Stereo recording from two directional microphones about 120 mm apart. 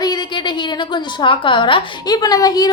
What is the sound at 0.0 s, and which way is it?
A woman's voice, 35° left (ahead or behind).